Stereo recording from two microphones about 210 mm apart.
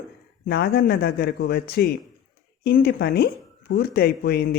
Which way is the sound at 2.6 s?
45° left (ahead or behind).